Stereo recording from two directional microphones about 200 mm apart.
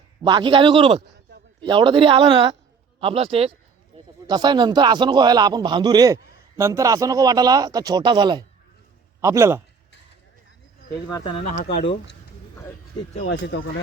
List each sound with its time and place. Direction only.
0.2 s speech: 20° right (ahead or behind)
3.9 s a sound: 30° right (ahead or behind)
4.3 s a man's voice: 20° right (ahead or behind)
11.1 s speech: 20° left (ahead or behind)
13.2 s speech: 60° left (ahead or behind)